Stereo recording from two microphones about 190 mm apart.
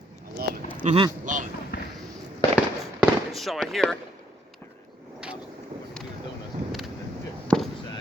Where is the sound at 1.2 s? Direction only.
40° right (ahead or behind).